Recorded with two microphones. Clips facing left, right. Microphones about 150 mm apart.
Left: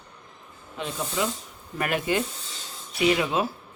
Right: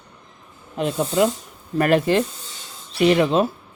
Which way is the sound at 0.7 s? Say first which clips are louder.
Right 9 dB; 55° right (ahead or behind).